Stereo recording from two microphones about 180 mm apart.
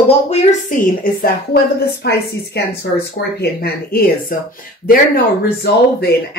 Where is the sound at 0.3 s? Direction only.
45° left (ahead or behind).